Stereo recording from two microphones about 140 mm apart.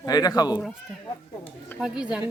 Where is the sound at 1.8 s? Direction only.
5° right (ahead or behind).